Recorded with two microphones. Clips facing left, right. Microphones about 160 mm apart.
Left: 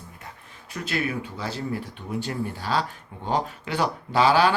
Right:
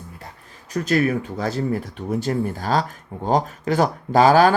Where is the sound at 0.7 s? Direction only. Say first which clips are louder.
Right 9 dB; 45° right (ahead or behind).